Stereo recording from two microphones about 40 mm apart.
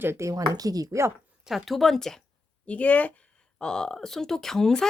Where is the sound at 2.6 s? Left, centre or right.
Left.